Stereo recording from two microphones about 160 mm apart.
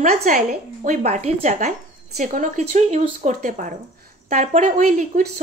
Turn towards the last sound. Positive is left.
turn(degrees=-50)  # may be behind; listen again after turning